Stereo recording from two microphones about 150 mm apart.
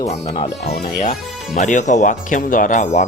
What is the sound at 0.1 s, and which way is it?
Speech, 45° left (ahead or behind).